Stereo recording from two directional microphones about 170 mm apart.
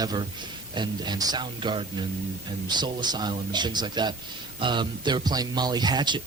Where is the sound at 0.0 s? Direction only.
25° right (ahead or behind).